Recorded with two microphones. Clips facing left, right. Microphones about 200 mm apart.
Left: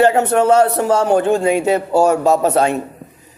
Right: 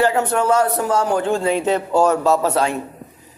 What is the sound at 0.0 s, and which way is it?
A man's voice, 25° left (ahead or behind).